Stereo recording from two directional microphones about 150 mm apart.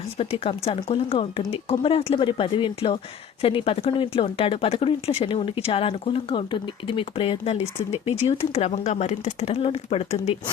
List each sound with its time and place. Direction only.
0.2 s speech: 40° left (ahead or behind)